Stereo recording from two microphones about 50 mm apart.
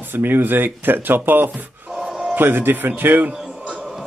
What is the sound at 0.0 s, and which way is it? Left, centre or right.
Speech, right.